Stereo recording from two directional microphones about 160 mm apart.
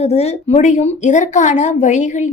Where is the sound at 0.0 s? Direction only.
40° left (ahead or behind).